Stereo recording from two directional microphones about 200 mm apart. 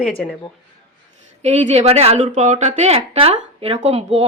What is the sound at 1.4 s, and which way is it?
Speech, 35° right (ahead or behind).